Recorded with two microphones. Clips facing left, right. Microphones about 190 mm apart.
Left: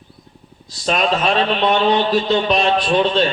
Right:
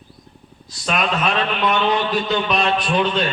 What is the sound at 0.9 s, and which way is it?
A man's voice, 35° left (ahead or behind).